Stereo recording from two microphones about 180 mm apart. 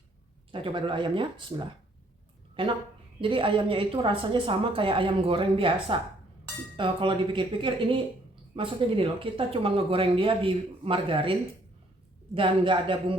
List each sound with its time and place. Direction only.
0.5 s a woman's voice: 30° right (ahead or behind)